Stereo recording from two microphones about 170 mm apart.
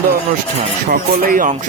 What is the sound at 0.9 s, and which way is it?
Speech, 55° right (ahead or behind).